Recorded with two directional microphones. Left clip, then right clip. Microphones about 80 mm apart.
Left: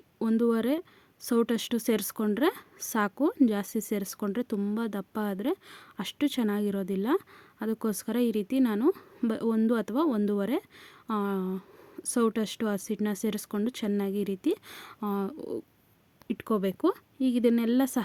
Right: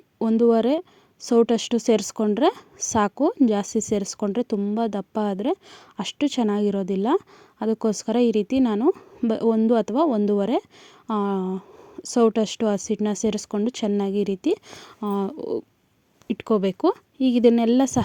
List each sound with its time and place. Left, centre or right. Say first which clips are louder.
0.2 s speech: right 8 dB; right
1.2 s speech: right 9 dB; centre
4.5 s speech: right 7 dB; centre
4.8 s speech: right 9 dB; centre
14.7 s speech: right 3 dB; centre
15.0 s a woman's voice: right 7 dB; right